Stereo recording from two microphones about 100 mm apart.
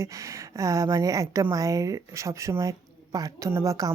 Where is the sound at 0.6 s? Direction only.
30° right (ahead or behind).